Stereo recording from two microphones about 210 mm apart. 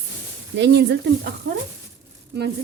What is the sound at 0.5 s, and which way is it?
Speech, 55° right (ahead or behind).